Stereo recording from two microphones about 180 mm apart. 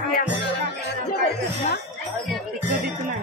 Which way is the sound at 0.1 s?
70° left (ahead or behind).